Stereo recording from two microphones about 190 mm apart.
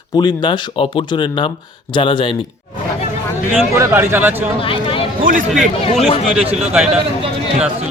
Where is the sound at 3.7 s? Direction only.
15° right (ahead or behind).